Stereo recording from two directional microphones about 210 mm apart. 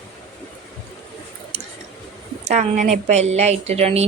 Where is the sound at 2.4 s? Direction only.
35° right (ahead or behind).